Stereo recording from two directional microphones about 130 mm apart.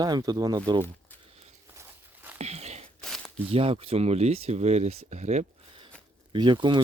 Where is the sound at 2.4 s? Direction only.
55° right (ahead or behind).